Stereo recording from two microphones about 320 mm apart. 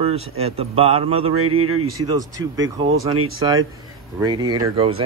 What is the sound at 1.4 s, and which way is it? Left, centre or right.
Speech, right.